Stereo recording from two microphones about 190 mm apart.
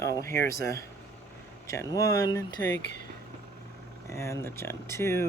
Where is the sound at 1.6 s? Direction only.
15° left (ahead or behind).